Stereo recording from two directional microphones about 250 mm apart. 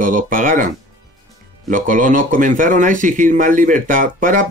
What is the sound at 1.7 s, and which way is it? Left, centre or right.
Speech, right.